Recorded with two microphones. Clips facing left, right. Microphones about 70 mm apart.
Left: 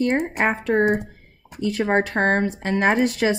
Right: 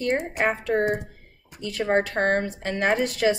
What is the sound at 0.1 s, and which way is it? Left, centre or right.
Speech, left.